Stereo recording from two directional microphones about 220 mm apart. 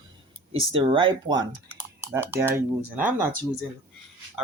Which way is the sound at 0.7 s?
20° right (ahead or behind).